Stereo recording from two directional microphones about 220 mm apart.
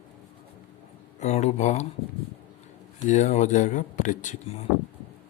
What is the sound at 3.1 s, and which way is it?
Speech, 30° left (ahead or behind).